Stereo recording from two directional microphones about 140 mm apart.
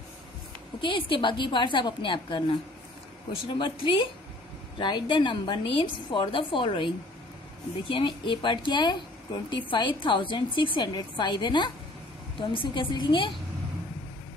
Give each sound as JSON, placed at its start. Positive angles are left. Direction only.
{"t": 0.7, "sound": "a woman's voice", "side_deg": 35}
{"t": 3.5, "sound": "a woman's voice", "side_deg": 35}
{"t": 7.9, "sound": "a woman's voice", "side_deg": 35}